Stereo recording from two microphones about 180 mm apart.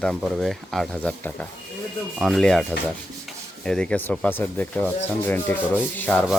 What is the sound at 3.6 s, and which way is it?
Speech, 5° left (ahead or behind).